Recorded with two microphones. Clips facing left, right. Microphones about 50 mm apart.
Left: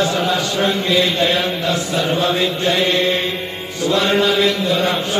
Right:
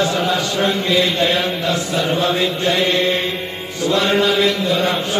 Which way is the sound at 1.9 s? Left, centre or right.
Right.